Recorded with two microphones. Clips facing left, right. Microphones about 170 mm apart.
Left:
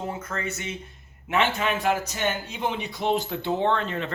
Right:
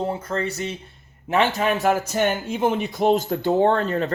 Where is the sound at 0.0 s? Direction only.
30° right (ahead or behind).